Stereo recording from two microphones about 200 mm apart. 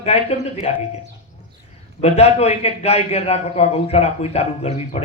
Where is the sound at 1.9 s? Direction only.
30° left (ahead or behind).